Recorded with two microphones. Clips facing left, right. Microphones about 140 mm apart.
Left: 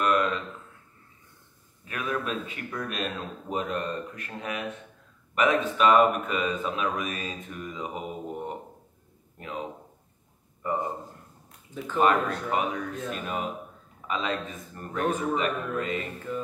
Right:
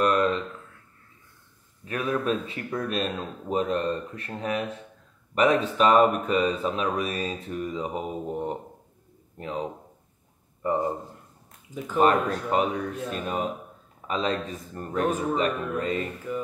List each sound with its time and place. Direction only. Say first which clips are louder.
0.0 s a sound: right 3 dB; 35° right (ahead or behind)
1.9 s speech: right 5 dB; 35° right (ahead or behind)
9.4 s a man's voice: right 4 dB; 35° right (ahead or behind)
12.0 s speech: right 2 dB; 35° right (ahead or behind)
16.3 s music: right 1 dB; 10° right (ahead or behind)